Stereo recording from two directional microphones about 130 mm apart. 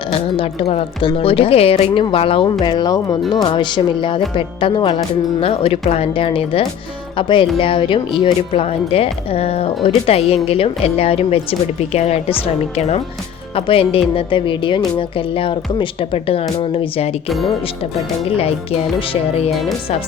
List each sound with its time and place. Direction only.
0.1 s a woman's voice: 50° left (ahead or behind)
13.6 s speech: 45° left (ahead or behind)
18.3 s speech: 50° left (ahead or behind)